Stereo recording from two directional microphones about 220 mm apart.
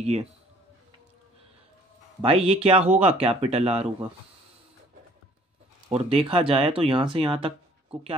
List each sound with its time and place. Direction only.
0.0 s speech: 30° right (ahead or behind)
2.2 s speech: 25° right (ahead or behind)
5.9 s speech: 25° right (ahead or behind)